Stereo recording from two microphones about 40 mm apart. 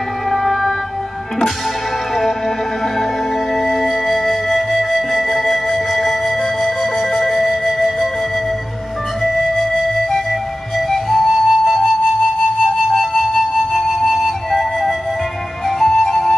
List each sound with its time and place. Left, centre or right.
0.3 s music: centre
3.5 s music: centre
9.2 s music: centre
10.9 s flute: centre
12.4 s music: centre
13.2 s flute: centre
15.8 s music: centre